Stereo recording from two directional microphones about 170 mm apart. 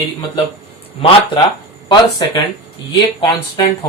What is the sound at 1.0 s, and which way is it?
Speech, 30° left (ahead or behind).